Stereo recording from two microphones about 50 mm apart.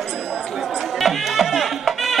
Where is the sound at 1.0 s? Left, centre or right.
Centre.